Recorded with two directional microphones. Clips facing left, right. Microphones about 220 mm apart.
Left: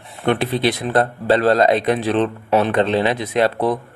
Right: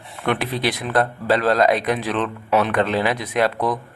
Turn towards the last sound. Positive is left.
turn(degrees=30)  # may be behind; listen again after turning